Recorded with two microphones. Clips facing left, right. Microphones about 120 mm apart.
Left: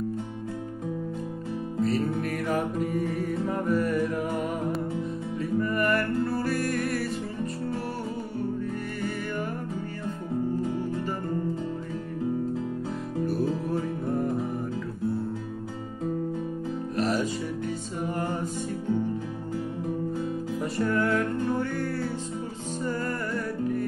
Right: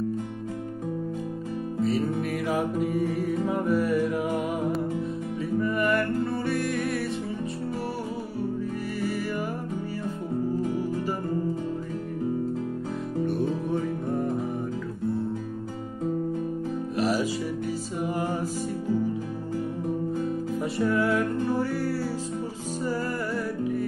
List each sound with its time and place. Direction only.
1.8 s music: centre (ahead or behind)
13.2 s music: centre (ahead or behind)
16.9 s music: 5° right (ahead or behind)
20.6 s music: centre (ahead or behind)